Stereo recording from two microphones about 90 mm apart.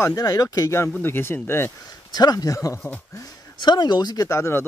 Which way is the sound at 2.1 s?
45° left (ahead or behind).